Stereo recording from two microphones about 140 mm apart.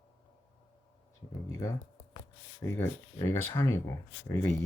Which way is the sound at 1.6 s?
25° left (ahead or behind).